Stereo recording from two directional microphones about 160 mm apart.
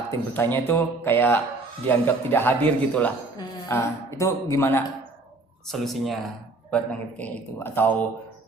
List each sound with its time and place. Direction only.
0.1 s speech: 15° left (ahead or behind)
5.6 s speech: centre (ahead or behind)